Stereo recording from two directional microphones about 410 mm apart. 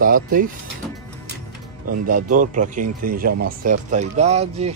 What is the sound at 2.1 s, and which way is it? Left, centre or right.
Speech, centre.